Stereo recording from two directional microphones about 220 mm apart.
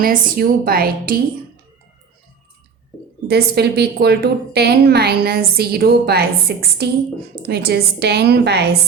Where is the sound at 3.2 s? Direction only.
45° right (ahead or behind).